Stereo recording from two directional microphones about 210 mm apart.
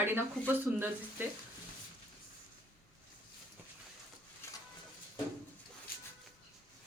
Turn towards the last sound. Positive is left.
turn(degrees=45)  # may be behind; listen again after turning